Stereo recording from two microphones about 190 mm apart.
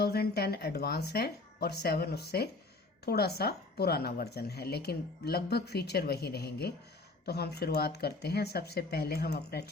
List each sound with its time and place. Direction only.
0.0 s a woman's voice: 55° left (ahead or behind)